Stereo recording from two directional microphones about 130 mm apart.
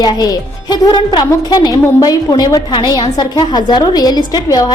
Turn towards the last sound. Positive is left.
turn(degrees=30)  # may be behind; listen again after turning